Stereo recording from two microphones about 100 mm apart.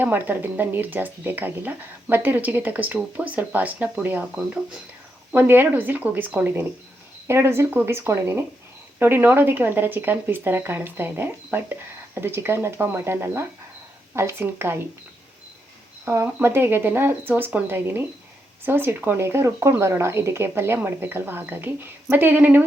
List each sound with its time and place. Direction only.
0.0 s speech: 20° right (ahead or behind)
16.0 s speech: 25° right (ahead or behind)